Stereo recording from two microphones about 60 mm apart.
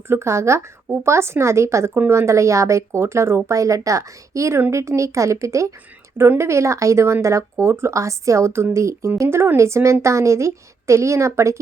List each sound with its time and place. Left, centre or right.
0.1 s speech: right
1.9 s a woman's voice: right
6.1 s a woman's voice: right